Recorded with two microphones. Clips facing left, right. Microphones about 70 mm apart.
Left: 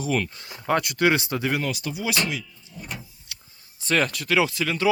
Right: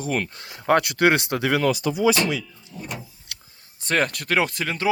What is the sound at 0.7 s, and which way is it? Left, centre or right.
Speech, right.